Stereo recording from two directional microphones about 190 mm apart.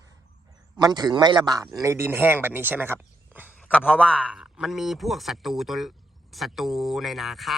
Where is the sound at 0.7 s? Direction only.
20° right (ahead or behind).